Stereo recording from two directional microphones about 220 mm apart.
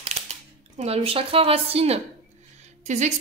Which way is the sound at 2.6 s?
30° right (ahead or behind).